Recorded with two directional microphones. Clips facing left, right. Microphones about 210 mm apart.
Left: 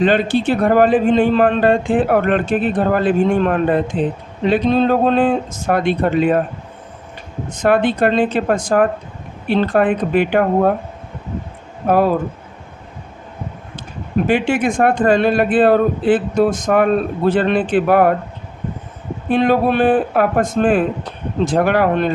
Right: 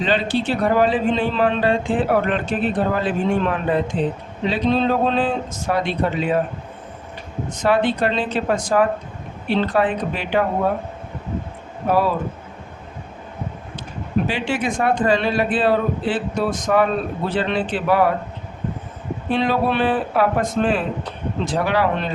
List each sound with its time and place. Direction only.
0.0 s a man's voice: 50° left (ahead or behind)
7.6 s a man's voice: 50° left (ahead or behind)
11.9 s a man's voice: 50° left (ahead or behind)
14.3 s a man's voice: 50° left (ahead or behind)
19.3 s a man's voice: 50° left (ahead or behind)